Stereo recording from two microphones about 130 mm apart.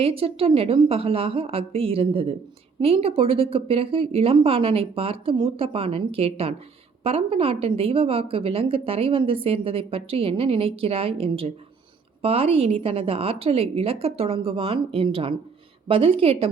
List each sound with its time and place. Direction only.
0.0 s a woman's voice: 45° right (ahead or behind)